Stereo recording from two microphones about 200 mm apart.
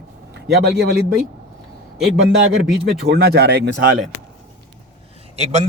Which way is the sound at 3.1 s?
55° right (ahead or behind).